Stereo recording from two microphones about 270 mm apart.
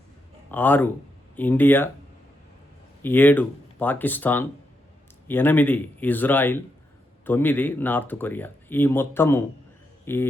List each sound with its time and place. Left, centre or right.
0.5 s speech: centre
3.0 s speech: centre